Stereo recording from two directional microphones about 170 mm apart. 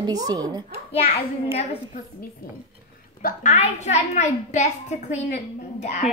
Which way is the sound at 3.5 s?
40° left (ahead or behind).